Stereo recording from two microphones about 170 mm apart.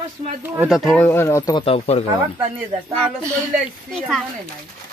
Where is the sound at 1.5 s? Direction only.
35° left (ahead or behind).